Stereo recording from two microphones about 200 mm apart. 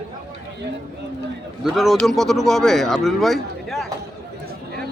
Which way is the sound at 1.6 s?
Centre (ahead or behind).